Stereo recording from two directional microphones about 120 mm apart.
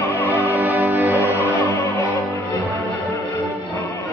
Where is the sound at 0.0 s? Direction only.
20° left (ahead or behind).